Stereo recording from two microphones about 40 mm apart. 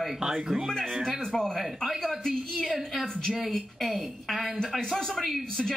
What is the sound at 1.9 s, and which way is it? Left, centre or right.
A woman's voice, centre.